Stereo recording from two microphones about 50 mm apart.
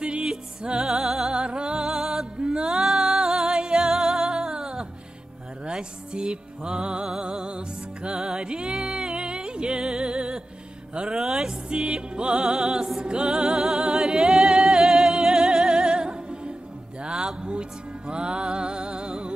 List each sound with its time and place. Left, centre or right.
0.0 s music: centre